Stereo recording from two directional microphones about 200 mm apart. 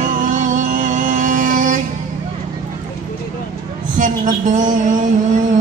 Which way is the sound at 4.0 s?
40° right (ahead or behind).